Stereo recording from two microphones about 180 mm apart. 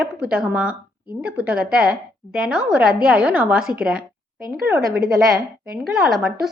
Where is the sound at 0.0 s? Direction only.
5° right (ahead or behind).